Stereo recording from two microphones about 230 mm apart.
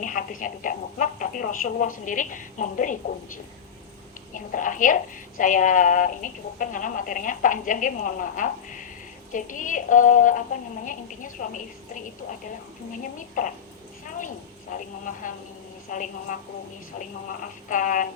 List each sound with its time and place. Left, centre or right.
0.0 s a woman's voice: left
17.7 s speech: left